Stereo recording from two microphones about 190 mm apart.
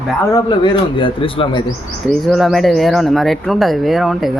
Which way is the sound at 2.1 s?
Centre (ahead or behind).